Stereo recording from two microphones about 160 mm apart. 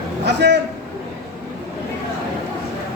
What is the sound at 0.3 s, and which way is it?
Speech, 90° right.